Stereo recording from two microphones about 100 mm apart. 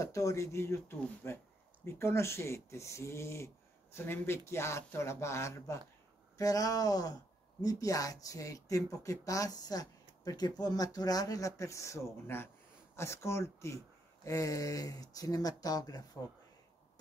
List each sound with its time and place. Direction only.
0.0 s speech: 35° left (ahead or behind)